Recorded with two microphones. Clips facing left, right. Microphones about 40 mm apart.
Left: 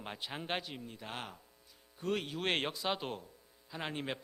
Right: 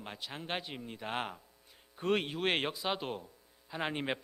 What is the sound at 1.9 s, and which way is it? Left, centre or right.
Speech, right.